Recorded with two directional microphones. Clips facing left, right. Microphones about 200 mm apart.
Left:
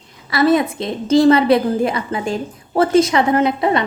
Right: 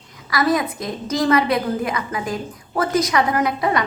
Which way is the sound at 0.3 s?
25° left (ahead or behind).